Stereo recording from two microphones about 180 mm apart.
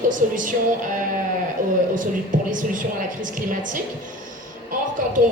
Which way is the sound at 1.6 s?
50° right (ahead or behind).